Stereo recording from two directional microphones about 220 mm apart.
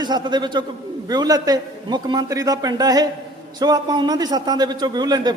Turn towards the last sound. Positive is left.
turn(degrees=-20)  # may be behind; listen again after turning